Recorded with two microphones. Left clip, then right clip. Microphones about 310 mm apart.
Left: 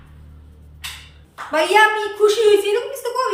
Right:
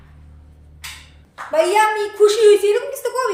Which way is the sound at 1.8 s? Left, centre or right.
Right.